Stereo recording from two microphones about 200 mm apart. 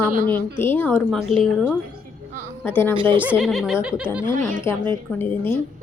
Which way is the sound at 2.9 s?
25° right (ahead or behind).